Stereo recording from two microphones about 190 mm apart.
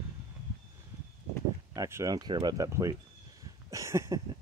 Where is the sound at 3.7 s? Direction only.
15° right (ahead or behind).